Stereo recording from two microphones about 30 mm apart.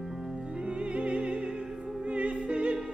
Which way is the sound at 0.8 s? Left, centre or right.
Right.